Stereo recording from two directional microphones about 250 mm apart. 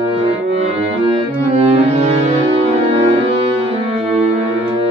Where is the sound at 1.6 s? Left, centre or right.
Right.